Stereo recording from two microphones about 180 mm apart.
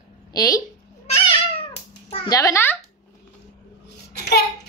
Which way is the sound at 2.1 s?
25° left (ahead or behind).